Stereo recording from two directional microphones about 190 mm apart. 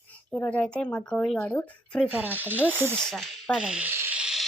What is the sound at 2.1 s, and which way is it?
Speech, 10° right (ahead or behind).